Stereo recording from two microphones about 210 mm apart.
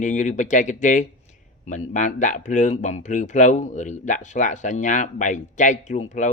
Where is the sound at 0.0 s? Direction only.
35° left (ahead or behind).